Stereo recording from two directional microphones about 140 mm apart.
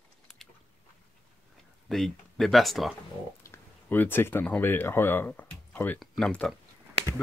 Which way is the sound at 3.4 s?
15° left (ahead or behind).